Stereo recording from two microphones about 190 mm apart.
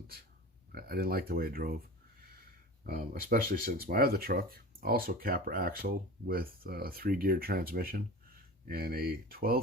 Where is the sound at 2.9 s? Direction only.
50° right (ahead or behind).